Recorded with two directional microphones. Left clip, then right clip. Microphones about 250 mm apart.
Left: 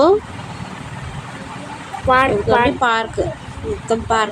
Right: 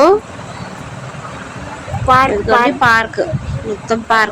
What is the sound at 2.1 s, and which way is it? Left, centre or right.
Speech, centre.